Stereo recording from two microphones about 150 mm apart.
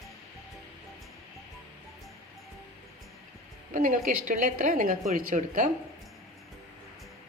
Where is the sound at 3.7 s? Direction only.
60° right (ahead or behind).